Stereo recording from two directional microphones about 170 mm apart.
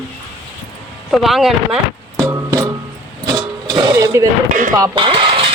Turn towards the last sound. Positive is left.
turn(degrees=-35)  # may be behind; listen again after turning